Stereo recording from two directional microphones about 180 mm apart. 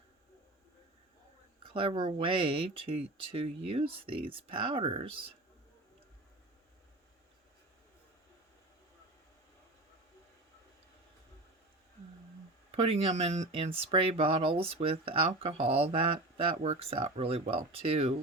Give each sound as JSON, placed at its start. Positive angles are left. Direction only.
{"t": 1.7, "sound": "speech", "side_deg": -30}
{"t": 12.7, "sound": "speech", "side_deg": -35}